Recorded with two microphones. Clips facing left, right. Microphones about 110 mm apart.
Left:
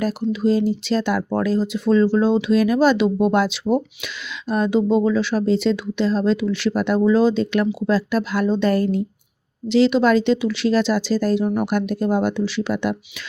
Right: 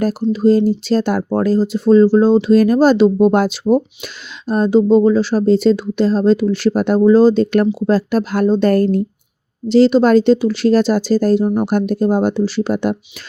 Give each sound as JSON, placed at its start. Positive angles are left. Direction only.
{"t": 0.3, "sound": "speech", "side_deg": -40}